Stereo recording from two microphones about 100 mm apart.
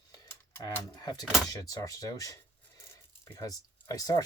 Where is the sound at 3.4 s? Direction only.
35° left (ahead or behind).